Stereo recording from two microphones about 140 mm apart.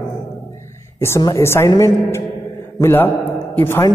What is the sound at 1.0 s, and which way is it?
A woman's voice, 20° left (ahead or behind).